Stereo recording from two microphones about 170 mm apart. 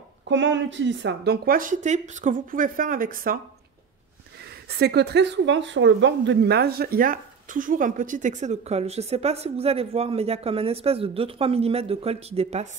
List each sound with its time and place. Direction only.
0.3 s speech: 90° right; by 3.3 s 55° right (ahead or behind)
4.6 s speech: 70° right (ahead or behind); by 12.6 s 40° right (ahead or behind)